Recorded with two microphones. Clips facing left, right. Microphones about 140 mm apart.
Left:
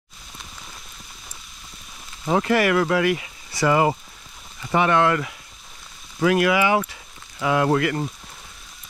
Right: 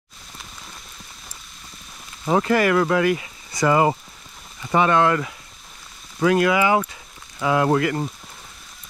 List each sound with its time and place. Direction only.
2.2 s speech: 30° right (ahead or behind)